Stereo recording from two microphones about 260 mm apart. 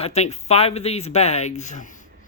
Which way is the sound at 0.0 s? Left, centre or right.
Left.